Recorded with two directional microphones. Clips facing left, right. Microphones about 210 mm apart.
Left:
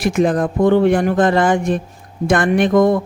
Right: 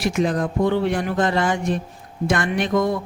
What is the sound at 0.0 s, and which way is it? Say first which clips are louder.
Speech: left 5 dB; 50° left (ahead or behind).